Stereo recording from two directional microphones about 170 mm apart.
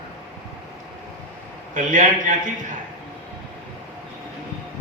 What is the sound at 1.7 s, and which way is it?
Speech, 50° right (ahead or behind).